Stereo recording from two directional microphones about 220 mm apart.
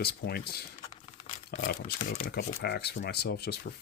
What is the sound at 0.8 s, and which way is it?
Crumpling, 30° left (ahead or behind).